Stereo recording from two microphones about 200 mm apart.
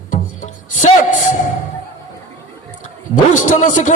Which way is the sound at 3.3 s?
40° left (ahead or behind).